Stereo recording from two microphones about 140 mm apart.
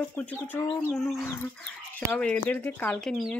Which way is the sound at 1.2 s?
15° left (ahead or behind).